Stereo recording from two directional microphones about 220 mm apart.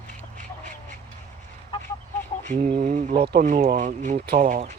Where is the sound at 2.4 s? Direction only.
40° right (ahead or behind).